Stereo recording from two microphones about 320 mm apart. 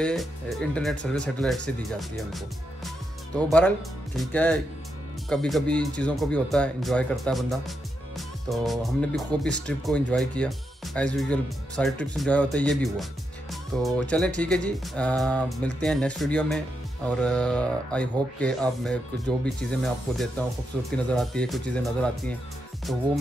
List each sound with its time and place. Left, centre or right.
0.0 s speech: centre